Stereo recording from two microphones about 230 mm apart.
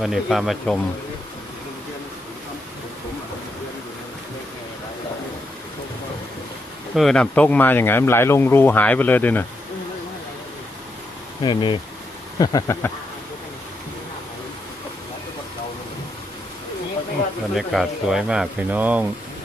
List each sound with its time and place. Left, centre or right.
0.0 s speech: centre
6.9 s speech: centre
11.4 s speech: left
17.5 s speech: centre